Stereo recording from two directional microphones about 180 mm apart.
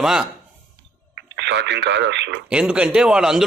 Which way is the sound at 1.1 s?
75° right (ahead or behind).